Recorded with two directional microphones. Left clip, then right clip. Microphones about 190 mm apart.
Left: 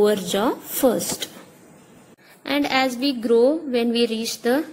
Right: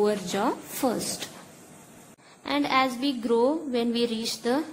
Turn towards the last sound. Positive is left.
turn(degrees=15)  # may be behind; listen again after turning